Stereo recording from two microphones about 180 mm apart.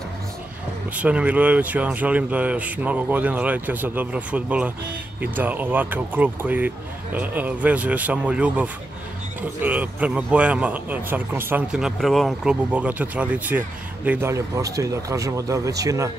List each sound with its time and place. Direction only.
0.9 s a man's voice: 10° right (ahead or behind)